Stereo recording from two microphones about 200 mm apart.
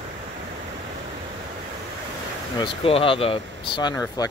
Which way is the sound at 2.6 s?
30° left (ahead or behind).